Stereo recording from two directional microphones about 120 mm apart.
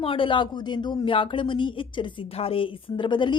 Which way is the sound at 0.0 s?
45° left (ahead or behind).